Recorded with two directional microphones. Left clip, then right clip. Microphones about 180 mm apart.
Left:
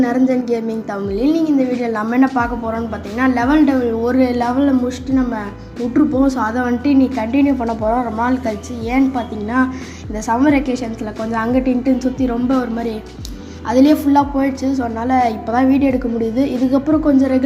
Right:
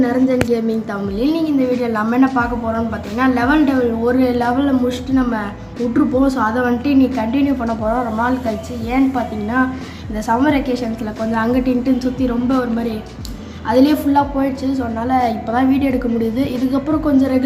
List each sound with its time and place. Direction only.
0.0 s a woman's voice: 25° left (ahead or behind)
13.7 s a woman's voice: 30° left (ahead or behind)